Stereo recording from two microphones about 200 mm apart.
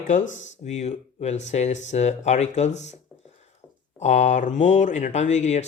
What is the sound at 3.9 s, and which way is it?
Speech, 35° left (ahead or behind).